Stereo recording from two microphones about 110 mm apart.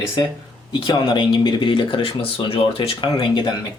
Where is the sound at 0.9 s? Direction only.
45° left (ahead or behind).